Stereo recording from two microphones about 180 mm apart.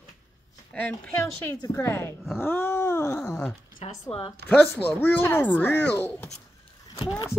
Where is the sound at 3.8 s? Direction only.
35° left (ahead or behind).